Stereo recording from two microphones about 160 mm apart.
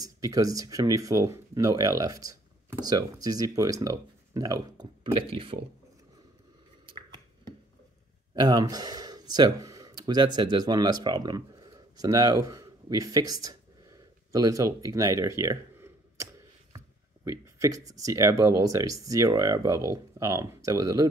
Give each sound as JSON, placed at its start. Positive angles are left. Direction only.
{"t": 0.0, "sound": "speech", "side_deg": -20}
{"t": 8.4, "sound": "speech", "side_deg": -25}